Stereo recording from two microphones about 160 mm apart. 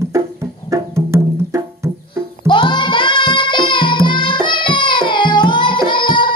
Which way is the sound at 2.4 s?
30° left (ahead or behind).